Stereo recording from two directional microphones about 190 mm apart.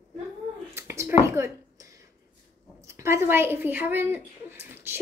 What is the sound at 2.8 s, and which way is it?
A woman's voice, 15° right (ahead or behind).